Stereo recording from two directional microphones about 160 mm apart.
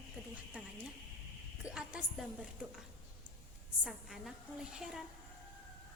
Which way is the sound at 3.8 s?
Centre (ahead or behind).